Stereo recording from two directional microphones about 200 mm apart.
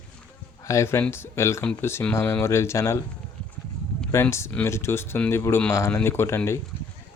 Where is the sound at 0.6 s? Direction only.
15° left (ahead or behind).